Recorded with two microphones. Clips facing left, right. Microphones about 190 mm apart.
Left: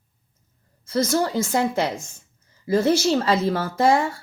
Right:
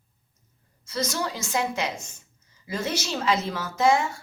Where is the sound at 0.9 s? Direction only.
55° left (ahead or behind).